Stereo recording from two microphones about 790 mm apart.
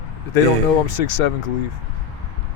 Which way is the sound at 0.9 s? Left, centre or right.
Left.